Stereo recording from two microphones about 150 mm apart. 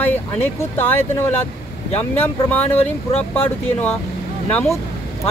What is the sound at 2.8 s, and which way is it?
Speech, 45° left (ahead or behind).